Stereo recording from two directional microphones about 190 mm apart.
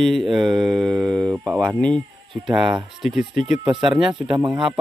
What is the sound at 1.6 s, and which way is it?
Speech, 5° left (ahead or behind).